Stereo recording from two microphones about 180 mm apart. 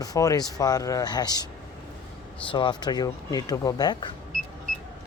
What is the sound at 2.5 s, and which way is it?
Speech, 25° left (ahead or behind).